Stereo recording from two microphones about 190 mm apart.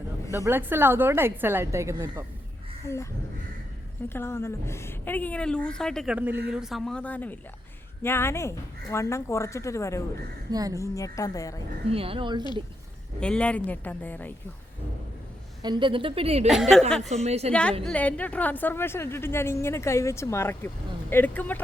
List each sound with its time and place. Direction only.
0.4 s a woman's voice: 10° right (ahead or behind)
2.8 s a woman's voice: 15° left (ahead or behind)
4.1 s a woman's voice: 10° left (ahead or behind)
10.5 s a woman's voice: 20° right (ahead or behind)
10.8 s a woman's voice: 15° left (ahead or behind)
11.9 s a woman's voice: 30° right (ahead or behind)
13.1 s a woman's voice: 5° left (ahead or behind)
15.6 s a woman's voice: 25° right (ahead or behind)
16.5 s speech: centre (ahead or behind)
17.2 s a woman's voice: 35° right (ahead or behind)
17.5 s a woman's voice: 5° left (ahead or behind)